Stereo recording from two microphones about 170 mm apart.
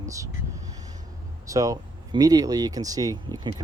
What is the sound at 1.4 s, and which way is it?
Speech, 20° right (ahead or behind).